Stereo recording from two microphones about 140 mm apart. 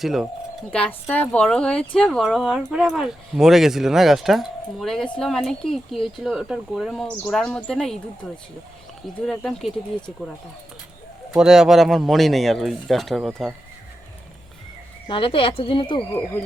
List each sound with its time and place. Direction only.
0.0 s speech: centre (ahead or behind)
0.7 s speech: 10° left (ahead or behind)
11.3 s speech: 5° right (ahead or behind)
15.0 s speech: 35° left (ahead or behind)